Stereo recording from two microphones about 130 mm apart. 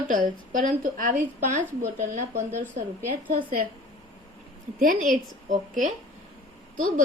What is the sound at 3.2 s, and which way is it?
Speech, 90° right.